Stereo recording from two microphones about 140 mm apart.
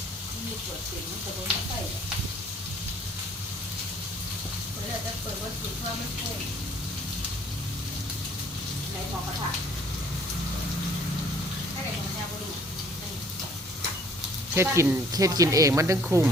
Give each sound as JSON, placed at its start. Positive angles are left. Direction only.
{"t": 14.5, "sound": "speech", "side_deg": -20}
{"t": 16.0, "sound": "speech", "side_deg": -10}